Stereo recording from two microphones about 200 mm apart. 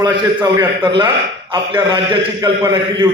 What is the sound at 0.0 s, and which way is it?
A man's voice, 20° right (ahead or behind).